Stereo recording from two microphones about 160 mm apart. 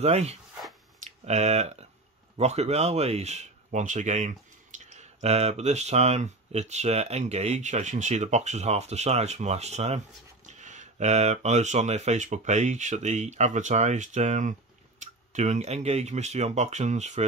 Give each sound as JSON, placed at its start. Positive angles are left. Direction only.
{"t": 0.0, "sound": "speech", "side_deg": -40}
{"t": 0.9, "sound": "a sound", "side_deg": -45}
{"t": 2.3, "sound": "speech", "side_deg": -40}